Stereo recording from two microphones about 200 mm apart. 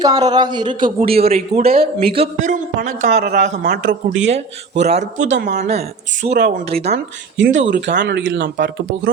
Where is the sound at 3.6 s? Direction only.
55° right (ahead or behind).